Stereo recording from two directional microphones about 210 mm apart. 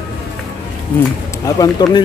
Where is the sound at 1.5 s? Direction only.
20° left (ahead or behind).